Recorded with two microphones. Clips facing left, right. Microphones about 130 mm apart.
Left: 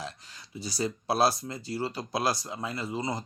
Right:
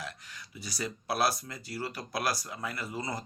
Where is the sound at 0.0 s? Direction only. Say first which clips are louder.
Left 2 dB; 30° left (ahead or behind).